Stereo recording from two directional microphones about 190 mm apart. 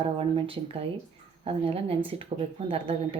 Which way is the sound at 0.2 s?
30° right (ahead or behind).